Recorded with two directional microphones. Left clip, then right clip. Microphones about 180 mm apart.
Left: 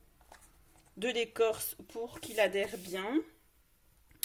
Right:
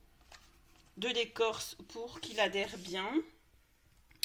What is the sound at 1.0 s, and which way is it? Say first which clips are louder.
Speech: left 2 dB; 40° left (ahead or behind).